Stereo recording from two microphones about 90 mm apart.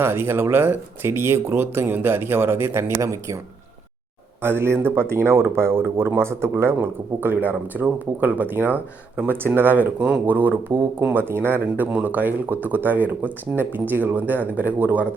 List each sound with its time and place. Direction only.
0.0 s speech: 25° right (ahead or behind)
4.4 s speech: 25° right (ahead or behind)